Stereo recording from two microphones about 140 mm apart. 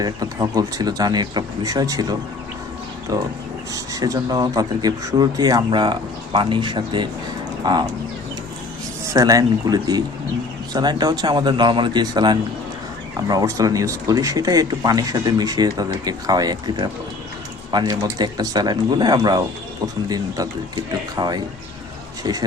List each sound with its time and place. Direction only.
0.0 s speech: 25° right (ahead or behind)
9.1 s speech: 25° right (ahead or behind)